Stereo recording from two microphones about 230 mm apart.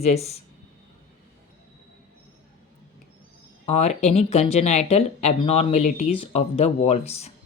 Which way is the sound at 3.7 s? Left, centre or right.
Left.